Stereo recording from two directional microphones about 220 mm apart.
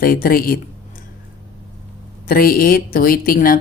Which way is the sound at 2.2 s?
40° left (ahead or behind).